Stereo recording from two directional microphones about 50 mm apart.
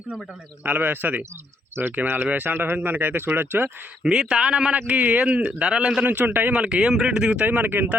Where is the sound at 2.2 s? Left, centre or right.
Right.